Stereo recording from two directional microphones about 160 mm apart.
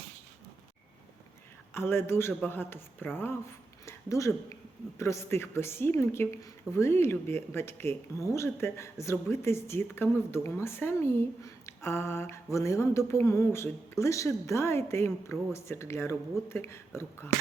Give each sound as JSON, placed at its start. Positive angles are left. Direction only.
{"t": 1.7, "sound": "speech", "side_deg": 15}
{"t": 3.8, "sound": "a sound", "side_deg": 20}
{"t": 4.9, "sound": "speech", "side_deg": 15}